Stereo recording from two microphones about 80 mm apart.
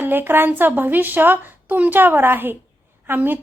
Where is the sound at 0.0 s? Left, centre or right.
Right.